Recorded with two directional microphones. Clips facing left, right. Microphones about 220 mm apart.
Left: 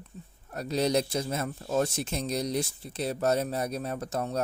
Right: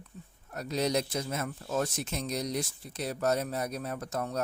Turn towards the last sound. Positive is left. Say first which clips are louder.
# left 3 dB
turn(degrees=30)  # may be behind; listen again after turning